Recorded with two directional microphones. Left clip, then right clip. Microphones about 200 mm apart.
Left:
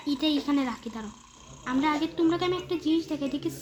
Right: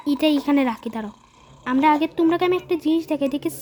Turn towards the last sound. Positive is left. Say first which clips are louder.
# right 8 dB
turn(degrees=-60)  # may be behind; listen again after turning